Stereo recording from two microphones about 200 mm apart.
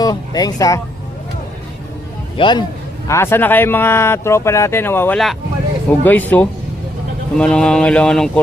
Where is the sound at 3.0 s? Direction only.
15° left (ahead or behind).